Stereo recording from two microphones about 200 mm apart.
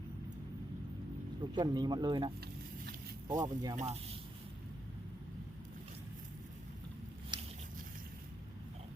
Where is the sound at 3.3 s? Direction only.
20° right (ahead or behind).